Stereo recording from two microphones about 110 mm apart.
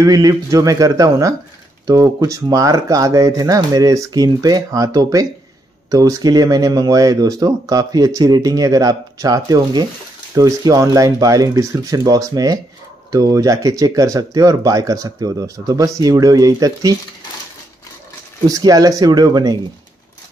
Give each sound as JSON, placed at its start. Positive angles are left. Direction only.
{"t": 0.0, "sound": "speech", "side_deg": -35}
{"t": 18.5, "sound": "speech", "side_deg": -35}